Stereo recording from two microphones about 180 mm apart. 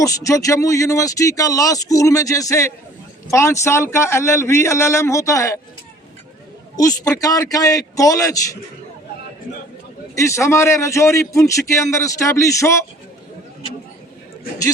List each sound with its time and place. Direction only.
0.0 s a man's voice: 20° left (ahead or behind)
6.7 s speech: 20° left (ahead or behind)
10.2 s a man's voice: 15° left (ahead or behind)